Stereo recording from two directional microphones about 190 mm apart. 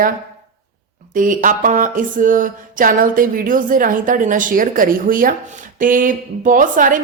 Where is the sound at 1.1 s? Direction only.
45° right (ahead or behind).